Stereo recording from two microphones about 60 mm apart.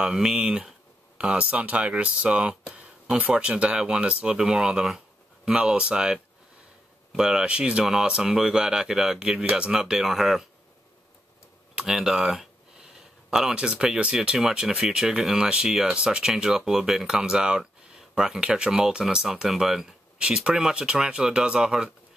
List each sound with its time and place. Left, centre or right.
0.0 s speech: centre
7.2 s speech: centre
11.7 s speech: centre
20.2 s speech: centre